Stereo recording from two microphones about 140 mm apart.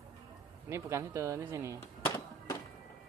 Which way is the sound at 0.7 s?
20° right (ahead or behind).